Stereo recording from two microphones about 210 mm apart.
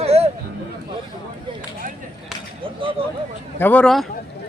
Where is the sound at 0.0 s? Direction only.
30° right (ahead or behind).